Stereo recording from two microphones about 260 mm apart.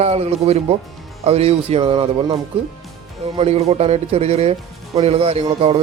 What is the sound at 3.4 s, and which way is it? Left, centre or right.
Speech, right.